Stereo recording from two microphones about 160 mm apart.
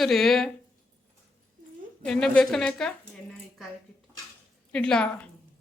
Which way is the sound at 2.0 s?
5° left (ahead or behind).